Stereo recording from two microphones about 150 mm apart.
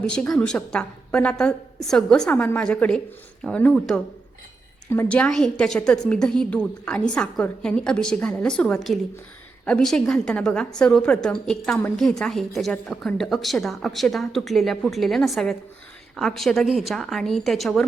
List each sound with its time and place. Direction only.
0.1 s a woman's voice: 5° left (ahead or behind)